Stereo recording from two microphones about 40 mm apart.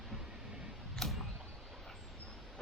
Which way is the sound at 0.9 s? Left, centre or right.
Centre.